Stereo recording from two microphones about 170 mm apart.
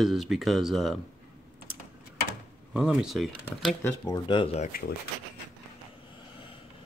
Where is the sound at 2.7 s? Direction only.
5° right (ahead or behind).